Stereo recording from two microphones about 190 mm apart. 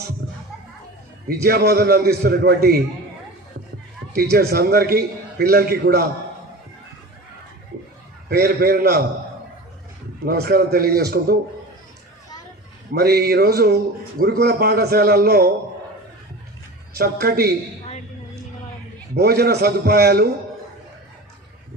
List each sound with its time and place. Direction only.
1.5 s a man's voice: 55° right (ahead or behind)
4.1 s a man's voice: 55° right (ahead or behind)
8.3 s a man's voice: 55° right (ahead or behind)
10.2 s a man's voice: 55° right (ahead or behind)
12.9 s a man's voice: 55° right (ahead or behind)
16.9 s a man's voice: 55° right (ahead or behind)
19.1 s a man's voice: 55° right (ahead or behind)